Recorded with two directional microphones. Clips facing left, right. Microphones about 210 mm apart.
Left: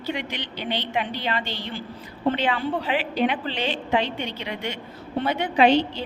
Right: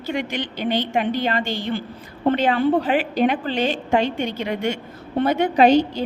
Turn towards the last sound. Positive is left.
turn(degrees=-45)  # may be behind; listen again after turning